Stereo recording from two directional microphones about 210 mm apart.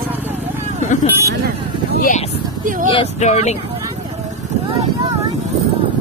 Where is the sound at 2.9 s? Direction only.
30° left (ahead or behind).